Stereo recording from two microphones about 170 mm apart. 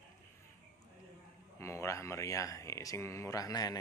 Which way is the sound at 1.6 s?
15° left (ahead or behind).